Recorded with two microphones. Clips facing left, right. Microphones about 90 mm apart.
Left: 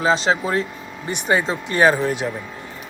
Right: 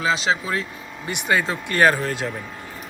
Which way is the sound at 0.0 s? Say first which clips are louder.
Left 3 dB; 35° left (ahead or behind).